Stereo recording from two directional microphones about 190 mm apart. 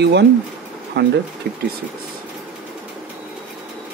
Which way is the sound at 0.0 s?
60° right (ahead or behind).